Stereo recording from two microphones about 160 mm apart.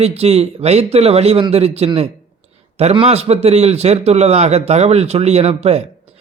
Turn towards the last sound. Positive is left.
turn(degrees=-40)  # may be behind; listen again after turning